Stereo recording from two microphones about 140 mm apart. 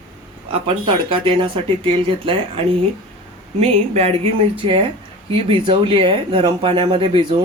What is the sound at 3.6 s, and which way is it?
Speech, 45° right (ahead or behind).